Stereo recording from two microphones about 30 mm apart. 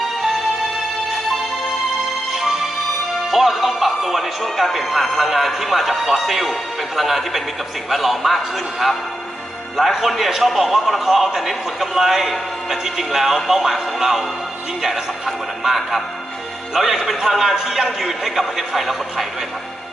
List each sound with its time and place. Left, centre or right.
3.2 s a man's voice: centre
15.6 s a man's voice: centre